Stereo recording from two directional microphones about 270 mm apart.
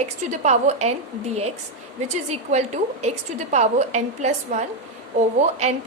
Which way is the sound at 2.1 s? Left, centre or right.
Right.